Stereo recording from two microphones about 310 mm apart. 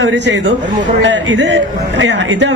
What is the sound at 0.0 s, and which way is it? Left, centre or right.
A man's voice, right.